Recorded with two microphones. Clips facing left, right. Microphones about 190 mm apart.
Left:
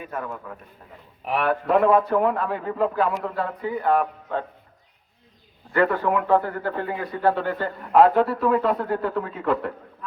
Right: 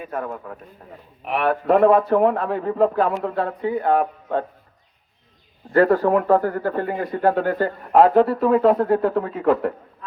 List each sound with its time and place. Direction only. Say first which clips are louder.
0.0 s speech: right 3 dB; 45° right (ahead or behind)
5.7 s speech: right 5 dB; 40° right (ahead or behind)